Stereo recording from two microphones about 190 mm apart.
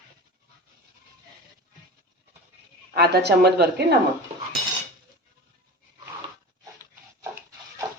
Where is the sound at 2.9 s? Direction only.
60° right (ahead or behind).